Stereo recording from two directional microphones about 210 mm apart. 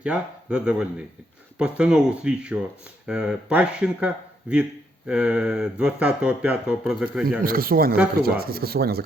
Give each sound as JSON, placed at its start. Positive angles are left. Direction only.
{"t": 0.0, "sound": "speech", "side_deg": -5}
{"t": 7.4, "sound": "speech", "side_deg": -45}